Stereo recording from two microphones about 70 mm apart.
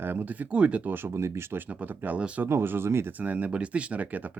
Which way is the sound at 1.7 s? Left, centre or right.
Right.